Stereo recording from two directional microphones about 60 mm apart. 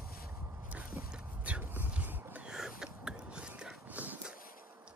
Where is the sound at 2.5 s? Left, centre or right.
Centre.